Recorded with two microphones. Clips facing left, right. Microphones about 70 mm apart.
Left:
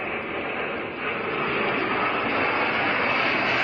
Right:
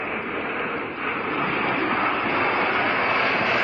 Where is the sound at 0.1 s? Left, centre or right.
Centre.